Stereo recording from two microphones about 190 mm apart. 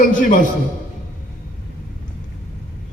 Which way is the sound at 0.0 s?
45° left (ahead or behind).